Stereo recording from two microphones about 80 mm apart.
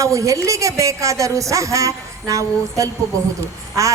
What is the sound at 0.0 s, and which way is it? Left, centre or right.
A woman's voice, right.